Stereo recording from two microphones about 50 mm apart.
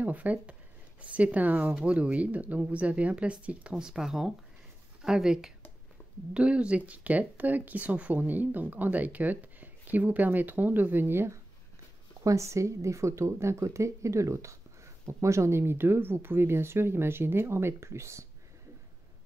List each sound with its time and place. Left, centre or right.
0.0 s speech: right
3.7 s speech: centre; by 11.2 s right
12.2 s speech: right
15.0 s speech: right
15.6 s speech: right